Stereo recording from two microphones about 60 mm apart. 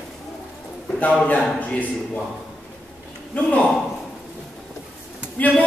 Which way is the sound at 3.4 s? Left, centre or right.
Left.